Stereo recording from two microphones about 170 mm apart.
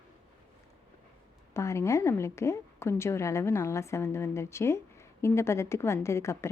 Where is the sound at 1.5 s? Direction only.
15° left (ahead or behind).